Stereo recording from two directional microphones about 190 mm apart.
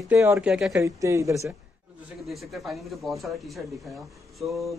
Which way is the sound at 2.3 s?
Centre (ahead or behind).